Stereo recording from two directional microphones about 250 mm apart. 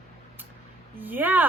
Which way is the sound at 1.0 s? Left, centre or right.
Centre.